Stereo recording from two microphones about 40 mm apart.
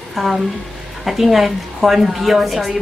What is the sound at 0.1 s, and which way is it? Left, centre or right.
A woman's voice, centre.